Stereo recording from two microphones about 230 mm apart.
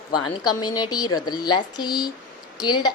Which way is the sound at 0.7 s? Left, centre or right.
Centre.